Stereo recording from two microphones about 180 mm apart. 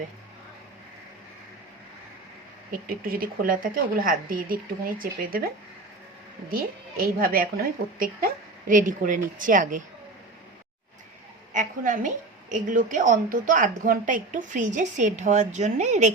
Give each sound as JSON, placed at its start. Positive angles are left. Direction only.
{"t": 2.8, "sound": "a woman's voice", "side_deg": -55}
{"t": 6.5, "sound": "a woman's voice", "side_deg": -55}
{"t": 11.5, "sound": "a woman's voice", "side_deg": -45}